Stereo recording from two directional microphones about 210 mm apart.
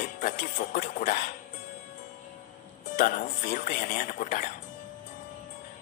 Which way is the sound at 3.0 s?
35° left (ahead or behind).